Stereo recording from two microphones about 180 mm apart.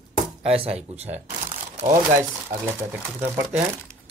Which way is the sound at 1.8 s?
15° right (ahead or behind).